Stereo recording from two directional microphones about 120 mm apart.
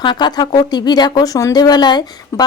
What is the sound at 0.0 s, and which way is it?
Speech, 40° left (ahead or behind).